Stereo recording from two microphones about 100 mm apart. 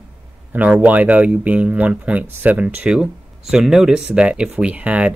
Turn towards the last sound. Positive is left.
turn(degrees=-10)  # may be behind; listen again after turning